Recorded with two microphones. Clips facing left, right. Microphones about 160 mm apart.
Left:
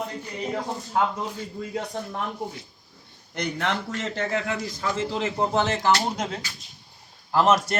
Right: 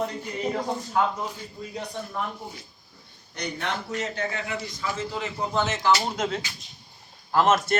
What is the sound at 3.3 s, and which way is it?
A man's voice, 90° left.